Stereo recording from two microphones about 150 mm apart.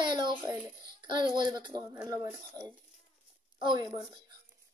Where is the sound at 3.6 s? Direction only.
30° right (ahead or behind).